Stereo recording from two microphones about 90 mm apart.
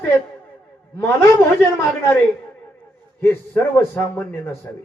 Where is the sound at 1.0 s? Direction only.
30° left (ahead or behind).